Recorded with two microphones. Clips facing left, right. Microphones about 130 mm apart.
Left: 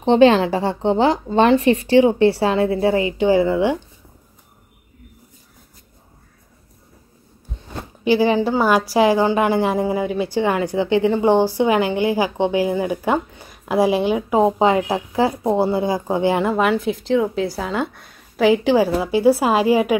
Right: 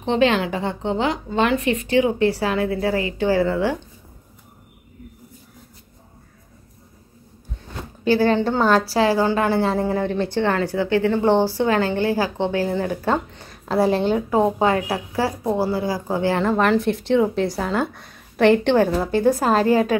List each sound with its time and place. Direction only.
0.0 s a woman's voice: 30° left (ahead or behind)
8.0 s a woman's voice: 15° left (ahead or behind)